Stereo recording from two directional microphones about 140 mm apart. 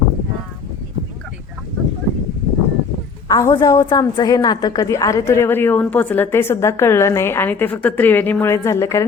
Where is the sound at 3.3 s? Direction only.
25° left (ahead or behind).